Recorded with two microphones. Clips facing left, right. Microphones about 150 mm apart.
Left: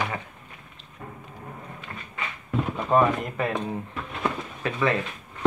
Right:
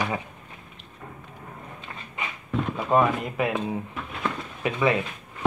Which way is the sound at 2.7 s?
5° right (ahead or behind).